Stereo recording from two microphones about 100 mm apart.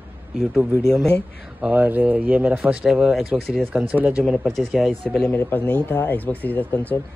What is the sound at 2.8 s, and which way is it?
Speech, centre (ahead or behind).